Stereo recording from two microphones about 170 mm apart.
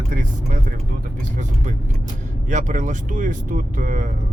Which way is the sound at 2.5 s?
45° right (ahead or behind).